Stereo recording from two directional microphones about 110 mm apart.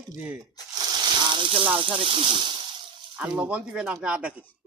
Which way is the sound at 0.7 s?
40° right (ahead or behind).